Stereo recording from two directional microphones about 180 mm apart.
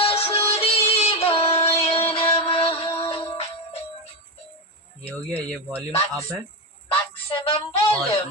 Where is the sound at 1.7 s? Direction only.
35° left (ahead or behind).